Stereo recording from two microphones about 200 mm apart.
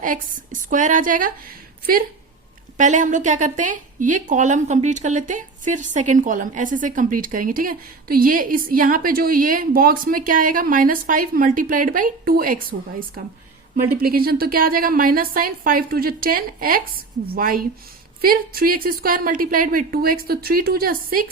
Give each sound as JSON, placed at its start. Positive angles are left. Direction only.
{"t": 0.0, "sound": "a woman's voice", "side_deg": -40}
{"t": 2.7, "sound": "a woman's voice", "side_deg": -40}
{"t": 14.0, "sound": "a woman's voice", "side_deg": -50}